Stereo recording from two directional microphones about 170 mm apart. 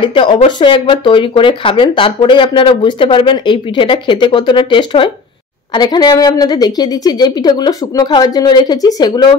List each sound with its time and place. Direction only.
0.0 s speech: 30° left (ahead or behind)